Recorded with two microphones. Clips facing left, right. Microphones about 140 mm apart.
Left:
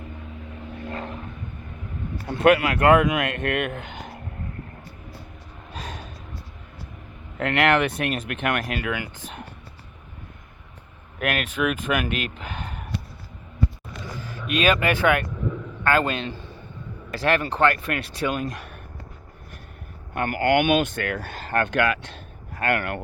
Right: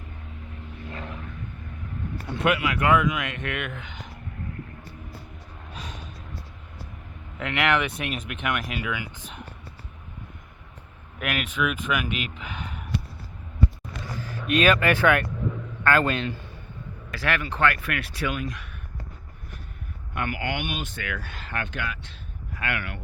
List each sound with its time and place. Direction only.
2.2 s speech: 50° left (ahead or behind)
7.3 s speech: 45° left (ahead or behind)
7.9 s speech: centre (ahead or behind)
8.3 s speech: 50° left (ahead or behind)
11.2 s speech: 45° left (ahead or behind)
12.0 s speech: centre (ahead or behind)
12.4 s speech: 40° left (ahead or behind)
14.4 s a man's voice: 20° left (ahead or behind)
18.3 s speech: 40° left (ahead or behind)
20.1 s speech: 45° left (ahead or behind)
20.6 s speech: 75° left (ahead or behind)
22.5 s speech: 45° left (ahead or behind)